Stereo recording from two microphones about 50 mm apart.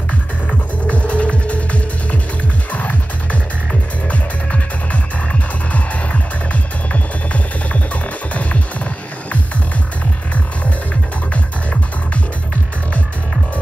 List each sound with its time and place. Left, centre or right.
0.5 s music: left
11.3 s music: left